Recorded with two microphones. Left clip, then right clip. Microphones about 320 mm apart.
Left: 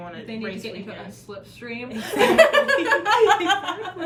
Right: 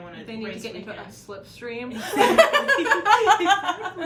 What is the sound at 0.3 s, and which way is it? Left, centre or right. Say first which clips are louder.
Speech: even; centre.